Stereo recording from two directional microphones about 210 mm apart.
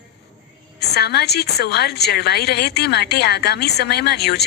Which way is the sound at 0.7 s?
50° left (ahead or behind).